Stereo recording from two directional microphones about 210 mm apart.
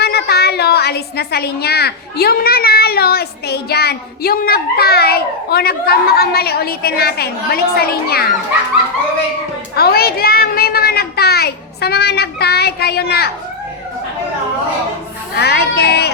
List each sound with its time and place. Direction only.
0.0 s a woman's voice: 50° left (ahead or behind)
9.7 s a child's voice: 45° left (ahead or behind)
15.4 s a woman's voice: 50° left (ahead or behind)